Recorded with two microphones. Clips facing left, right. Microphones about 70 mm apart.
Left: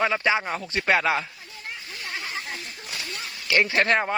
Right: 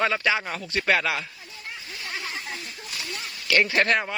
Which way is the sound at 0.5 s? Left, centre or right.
Left.